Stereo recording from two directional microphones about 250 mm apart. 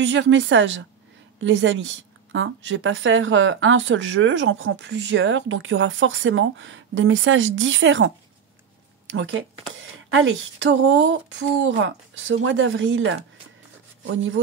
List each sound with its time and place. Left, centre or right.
0.0 s a woman's voice: right
9.1 s a woman's voice: right